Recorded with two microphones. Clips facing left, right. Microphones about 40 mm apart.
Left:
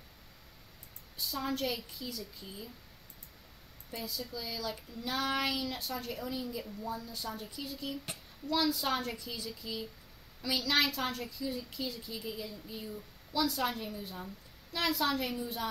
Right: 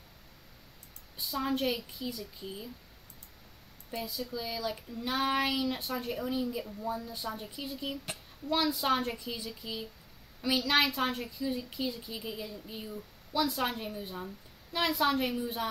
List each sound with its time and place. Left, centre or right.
1.1 s a woman's voice: right
3.9 s a woman's voice: centre